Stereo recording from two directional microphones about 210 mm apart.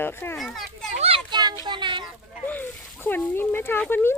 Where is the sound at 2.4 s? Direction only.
10° left (ahead or behind).